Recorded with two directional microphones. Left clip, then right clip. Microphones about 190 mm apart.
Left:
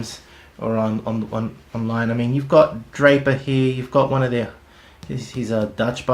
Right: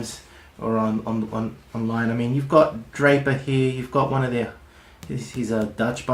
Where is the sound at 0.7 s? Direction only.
45° left (ahead or behind).